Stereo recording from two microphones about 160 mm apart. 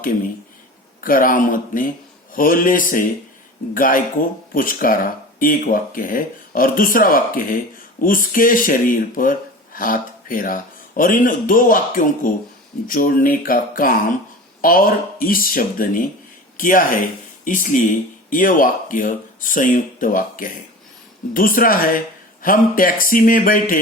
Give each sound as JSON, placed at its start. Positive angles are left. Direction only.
{"t": 1.0, "sound": "speech", "side_deg": 60}